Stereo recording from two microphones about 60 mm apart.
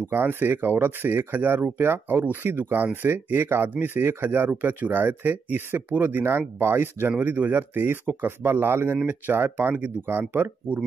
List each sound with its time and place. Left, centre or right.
0.0 s speech: right